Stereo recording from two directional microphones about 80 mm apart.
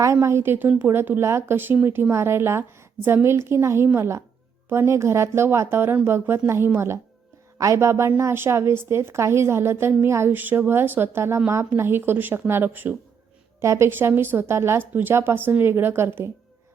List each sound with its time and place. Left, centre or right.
0.0 s a woman's voice: right
13.6 s a woman's voice: right